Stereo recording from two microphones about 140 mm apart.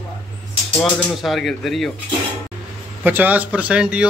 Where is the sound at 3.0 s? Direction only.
10° right (ahead or behind).